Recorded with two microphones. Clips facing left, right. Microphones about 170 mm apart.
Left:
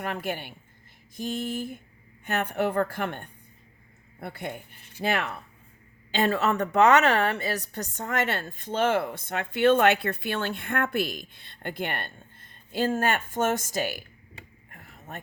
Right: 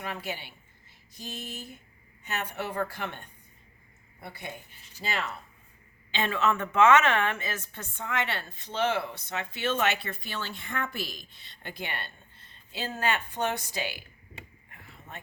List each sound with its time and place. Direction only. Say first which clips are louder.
0.0 s a woman's voice: left 5 dB; 50° left (ahead or behind)
6.1 s a woman's voice: left 3 dB; 40° left (ahead or behind)
14.7 s a sound: left 6 dB; 45° left (ahead or behind)